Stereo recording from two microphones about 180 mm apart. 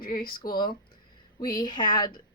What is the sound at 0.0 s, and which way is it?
Speech, 55° left (ahead or behind).